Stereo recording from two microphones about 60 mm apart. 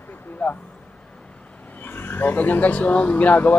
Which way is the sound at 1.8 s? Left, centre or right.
Left.